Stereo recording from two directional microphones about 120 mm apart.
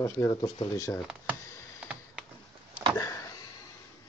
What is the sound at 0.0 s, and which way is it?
Speech, 30° left (ahead or behind).